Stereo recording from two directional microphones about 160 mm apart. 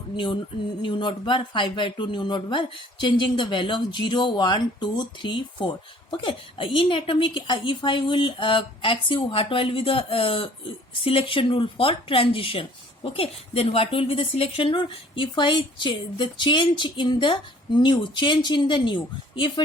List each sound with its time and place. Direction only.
0.8 s a woman's voice: 30° left (ahead or behind)